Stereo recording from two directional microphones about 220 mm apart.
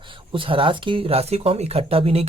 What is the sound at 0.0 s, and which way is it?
Speech, 20° right (ahead or behind).